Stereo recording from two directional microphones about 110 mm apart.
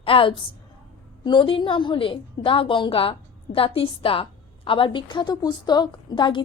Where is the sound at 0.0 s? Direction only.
55° left (ahead or behind).